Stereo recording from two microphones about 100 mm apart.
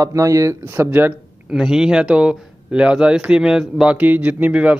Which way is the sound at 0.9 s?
15° right (ahead or behind).